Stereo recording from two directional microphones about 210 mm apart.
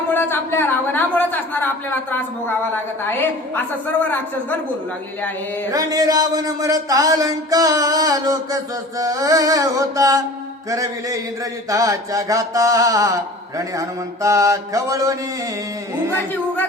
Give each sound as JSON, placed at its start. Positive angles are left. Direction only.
{"t": 0.1, "sound": "a sound", "side_deg": 10}
{"t": 3.0, "sound": "a woman's voice", "side_deg": 10}
{"t": 5.7, "sound": "mantra", "side_deg": -15}